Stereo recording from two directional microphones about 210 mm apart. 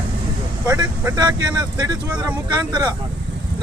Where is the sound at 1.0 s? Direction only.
20° right (ahead or behind).